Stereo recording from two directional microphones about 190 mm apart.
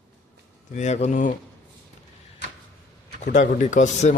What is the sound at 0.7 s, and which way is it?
Speech, 35° left (ahead or behind).